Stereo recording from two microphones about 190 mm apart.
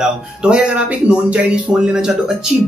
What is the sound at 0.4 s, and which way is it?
Speech, 5° right (ahead or behind).